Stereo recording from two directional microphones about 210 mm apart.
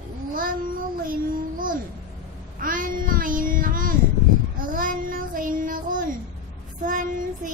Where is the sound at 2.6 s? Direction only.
40° right (ahead or behind).